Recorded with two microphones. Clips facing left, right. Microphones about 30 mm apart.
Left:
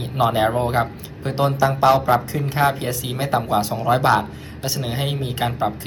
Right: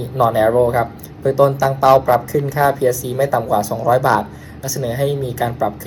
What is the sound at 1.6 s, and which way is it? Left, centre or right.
Speech, left.